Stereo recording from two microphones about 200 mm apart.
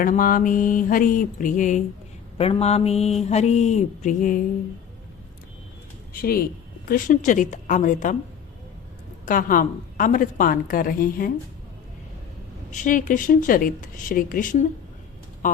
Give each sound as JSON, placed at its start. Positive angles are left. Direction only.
{"t": 0.0, "sound": "speech", "side_deg": 45}
{"t": 6.2, "sound": "speech", "side_deg": 50}
{"t": 9.2, "sound": "a woman's voice", "side_deg": 45}
{"t": 12.7, "sound": "a woman's voice", "side_deg": 40}
{"t": 15.4, "sound": "a sound", "side_deg": 40}